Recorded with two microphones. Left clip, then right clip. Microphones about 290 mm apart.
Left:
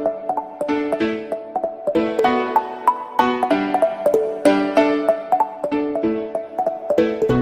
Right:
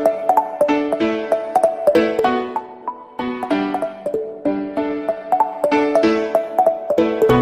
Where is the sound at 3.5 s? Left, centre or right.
Centre.